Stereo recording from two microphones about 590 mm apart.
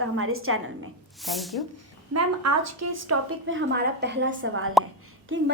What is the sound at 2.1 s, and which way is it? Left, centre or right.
A woman's voice, right.